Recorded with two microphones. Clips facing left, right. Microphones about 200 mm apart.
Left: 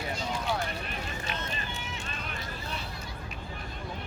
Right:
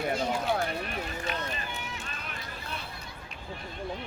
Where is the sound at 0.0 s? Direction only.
55° right (ahead or behind).